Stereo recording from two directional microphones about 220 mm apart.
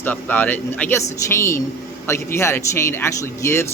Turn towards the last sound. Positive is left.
turn(degrees=10)  # may be behind; listen again after turning